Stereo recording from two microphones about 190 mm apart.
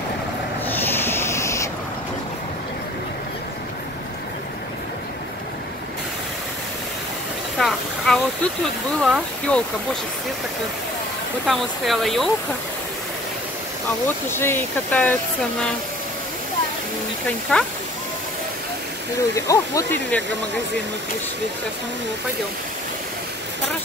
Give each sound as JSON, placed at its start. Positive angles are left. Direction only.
{"t": 0.7, "sound": "a sound", "side_deg": 10}
{"t": 7.5, "sound": "a sound", "side_deg": 0}
{"t": 9.0, "sound": "speech", "side_deg": 0}
{"t": 11.4, "sound": "speech", "side_deg": 0}
{"t": 14.0, "sound": "speech", "side_deg": 10}
{"t": 17.5, "sound": "speech", "side_deg": 5}
{"t": 19.1, "sound": "speech", "side_deg": 15}